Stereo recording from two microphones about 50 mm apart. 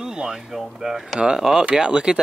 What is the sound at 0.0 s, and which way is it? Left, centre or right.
Speech, centre.